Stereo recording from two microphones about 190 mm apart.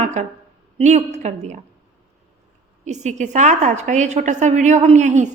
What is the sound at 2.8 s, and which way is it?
A woman's voice, 40° right (ahead or behind).